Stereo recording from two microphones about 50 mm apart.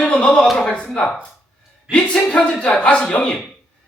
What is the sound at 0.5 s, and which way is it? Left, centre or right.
Speech, centre.